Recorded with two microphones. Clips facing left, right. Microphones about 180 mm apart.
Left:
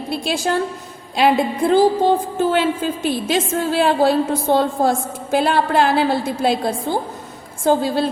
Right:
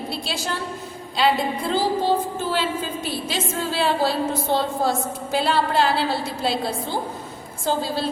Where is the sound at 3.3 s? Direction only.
50° left (ahead or behind).